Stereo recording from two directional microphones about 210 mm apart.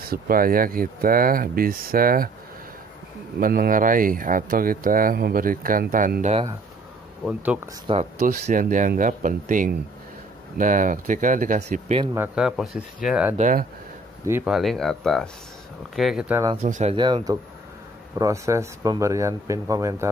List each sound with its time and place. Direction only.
0.0 s speech: 45° right (ahead or behind)
3.3 s speech: 40° right (ahead or behind)
7.2 s speech: 5° right (ahead or behind)
7.8 s speech: 30° right (ahead or behind)
12.0 s speech: 15° right (ahead or behind)
12.4 s speech: 5° right (ahead or behind)
13.4 s speech: 40° right (ahead or behind)
14.2 s speech: 10° right (ahead or behind)
16.6 s speech: 35° right (ahead or behind)
16.9 s speech: 20° right (ahead or behind)